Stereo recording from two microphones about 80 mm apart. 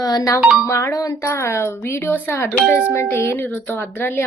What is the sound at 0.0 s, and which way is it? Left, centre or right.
A woman's voice, left.